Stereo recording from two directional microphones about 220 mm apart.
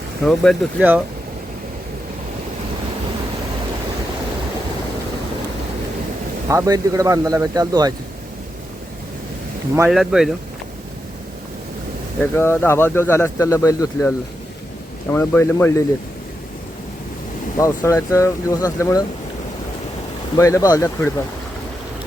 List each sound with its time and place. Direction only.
0.3 s speech: centre (ahead or behind)
6.5 s a man's voice: 15° right (ahead or behind)
9.7 s speech: 5° right (ahead or behind)
12.2 s speech: 10° left (ahead or behind)
15.1 s speech: 10° left (ahead or behind)
17.6 s speech: 15° left (ahead or behind)
20.3 s speech: 15° left (ahead or behind)